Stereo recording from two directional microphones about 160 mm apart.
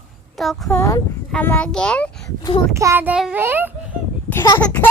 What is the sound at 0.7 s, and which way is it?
A child's voice, 20° left (ahead or behind).